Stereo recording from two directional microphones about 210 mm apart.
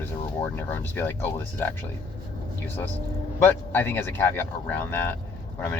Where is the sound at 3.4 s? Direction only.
10° left (ahead or behind).